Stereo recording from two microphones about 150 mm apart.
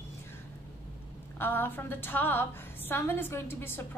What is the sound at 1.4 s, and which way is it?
A woman's voice, 15° left (ahead or behind).